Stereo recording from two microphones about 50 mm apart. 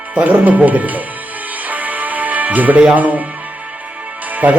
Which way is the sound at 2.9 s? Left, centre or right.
Right.